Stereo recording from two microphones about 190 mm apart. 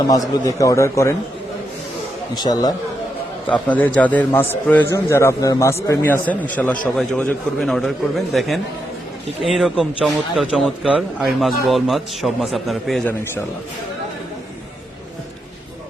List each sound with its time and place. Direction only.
0.1 s a man's voice: 15° left (ahead or behind)
2.3 s speech: 20° left (ahead or behind)
3.5 s a man's voice: 5° left (ahead or behind)